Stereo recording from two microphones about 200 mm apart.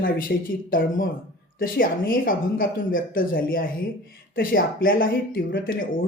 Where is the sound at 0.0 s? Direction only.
45° left (ahead or behind).